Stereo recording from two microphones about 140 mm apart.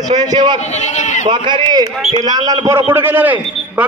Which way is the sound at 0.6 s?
55° left (ahead or behind).